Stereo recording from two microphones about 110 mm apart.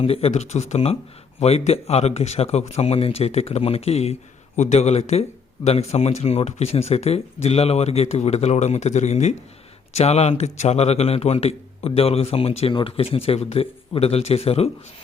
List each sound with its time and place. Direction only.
0.0 s a man's voice: 65° left (ahead or behind); by 9.4 s 90° left
9.9 s a man's voice: 80° left